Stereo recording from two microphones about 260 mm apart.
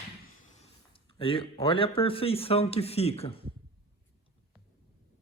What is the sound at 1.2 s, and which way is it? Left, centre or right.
A man's voice, centre.